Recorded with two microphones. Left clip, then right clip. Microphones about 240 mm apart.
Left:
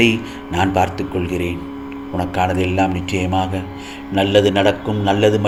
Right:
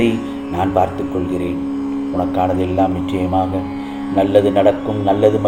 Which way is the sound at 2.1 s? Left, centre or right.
Left.